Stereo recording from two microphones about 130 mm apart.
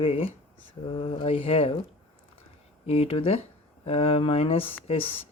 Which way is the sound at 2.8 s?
50° left (ahead or behind).